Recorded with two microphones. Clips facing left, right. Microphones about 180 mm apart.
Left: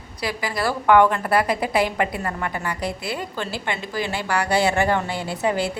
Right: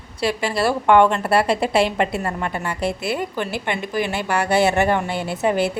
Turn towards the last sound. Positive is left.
turn(degrees=-20)  # may be behind; listen again after turning